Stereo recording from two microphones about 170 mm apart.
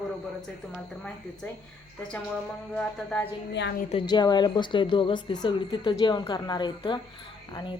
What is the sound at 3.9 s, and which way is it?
A woman's voice, 30° left (ahead or behind).